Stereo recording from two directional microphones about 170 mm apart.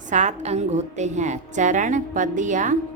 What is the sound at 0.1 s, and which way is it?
A woman's voice, 45° right (ahead or behind).